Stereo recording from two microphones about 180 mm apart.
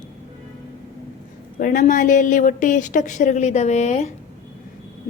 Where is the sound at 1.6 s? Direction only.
50° left (ahead or behind).